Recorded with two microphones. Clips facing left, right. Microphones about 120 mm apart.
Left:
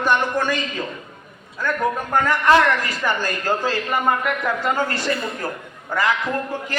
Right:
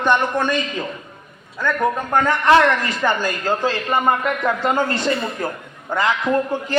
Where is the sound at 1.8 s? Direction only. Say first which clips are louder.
Right 2 dB; 20° right (ahead or behind).